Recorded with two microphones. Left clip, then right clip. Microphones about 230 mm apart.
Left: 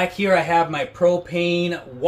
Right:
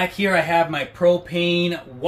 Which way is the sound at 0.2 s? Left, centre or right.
Centre.